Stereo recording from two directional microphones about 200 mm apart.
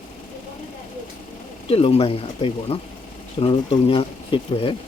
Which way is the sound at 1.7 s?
30° left (ahead or behind).